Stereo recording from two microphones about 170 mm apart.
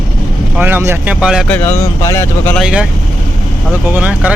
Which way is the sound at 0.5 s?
10° right (ahead or behind).